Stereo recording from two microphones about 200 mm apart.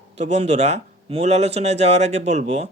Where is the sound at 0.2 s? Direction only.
35° right (ahead or behind).